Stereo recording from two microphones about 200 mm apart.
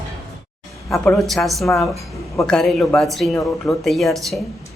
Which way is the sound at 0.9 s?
Centre (ahead or behind).